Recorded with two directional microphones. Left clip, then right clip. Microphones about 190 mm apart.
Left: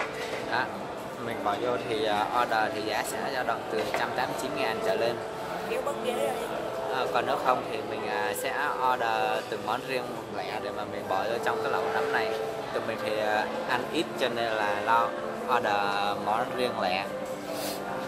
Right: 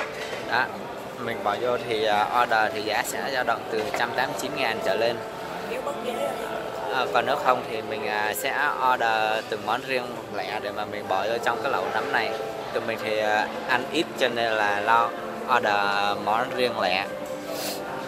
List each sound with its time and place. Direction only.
1.9 s speech: 10° right (ahead or behind)
6.9 s speech: 10° right (ahead or behind)
11.1 s speech: 15° right (ahead or behind)
13.1 s speech: 10° right (ahead or behind)